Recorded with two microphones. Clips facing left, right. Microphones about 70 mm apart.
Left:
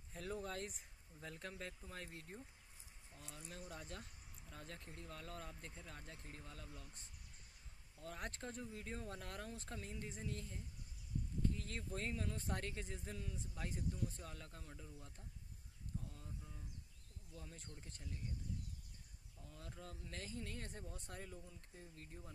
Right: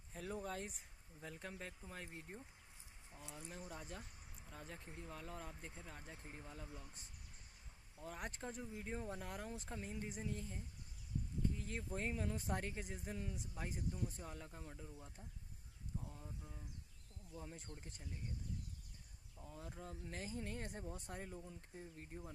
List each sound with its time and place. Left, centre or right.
0.1 s speech: centre
8.0 s speech: centre
16.0 s a sound: centre
17.3 s speech: centre
19.4 s speech: centre